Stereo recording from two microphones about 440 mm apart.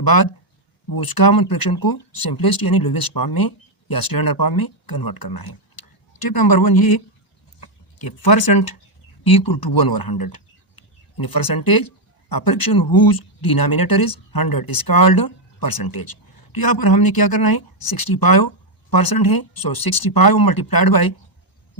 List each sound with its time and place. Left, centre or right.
0.0 s speech: left
7.6 s a sound: left
9.2 s speech: left